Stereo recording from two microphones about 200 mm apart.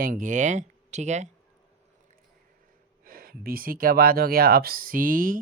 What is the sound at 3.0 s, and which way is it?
Speech, 45° right (ahead or behind).